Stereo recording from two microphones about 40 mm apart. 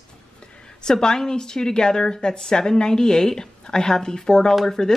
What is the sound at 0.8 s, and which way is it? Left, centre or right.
Speech, centre.